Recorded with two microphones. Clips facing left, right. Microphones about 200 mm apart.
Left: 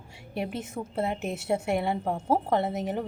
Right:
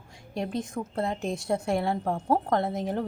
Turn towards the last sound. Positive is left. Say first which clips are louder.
# even
turn(degrees=5)  # may be behind; listen again after turning